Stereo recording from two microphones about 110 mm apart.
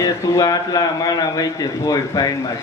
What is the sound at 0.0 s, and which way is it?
A man's voice, 35° left (ahead or behind).